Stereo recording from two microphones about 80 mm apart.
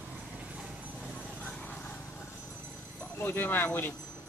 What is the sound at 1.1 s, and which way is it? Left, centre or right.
Clip-clop, centre.